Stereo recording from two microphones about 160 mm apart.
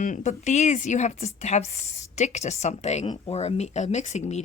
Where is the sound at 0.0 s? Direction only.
50° left (ahead or behind).